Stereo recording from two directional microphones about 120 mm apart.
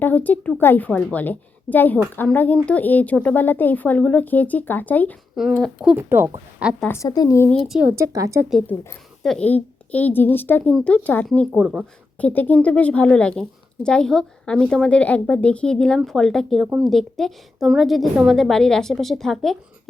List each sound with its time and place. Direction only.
0.0 s a woman's voice: 15° left (ahead or behind)
5.4 s a woman's voice: centre (ahead or behind)
6.1 s speech: 20° right (ahead or behind)
6.8 s a woman's voice: 25° left (ahead or behind)
7.5 s a woman's voice: centre (ahead or behind)
7.9 s speech: 30° right (ahead or behind)
8.6 s a woman's voice: 20° left (ahead or behind)
9.2 s a woman's voice: 5° left (ahead or behind)
9.5 s a woman's voice: 15° left (ahead or behind)
11.5 s a woman's voice: 5° right (ahead or behind)
12.1 s a woman's voice: 15° left (ahead or behind)